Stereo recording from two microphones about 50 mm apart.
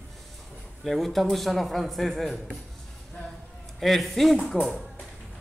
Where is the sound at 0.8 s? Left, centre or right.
Centre.